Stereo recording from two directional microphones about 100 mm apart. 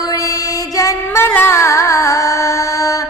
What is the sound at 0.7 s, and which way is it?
Music, 30° left (ahead or behind).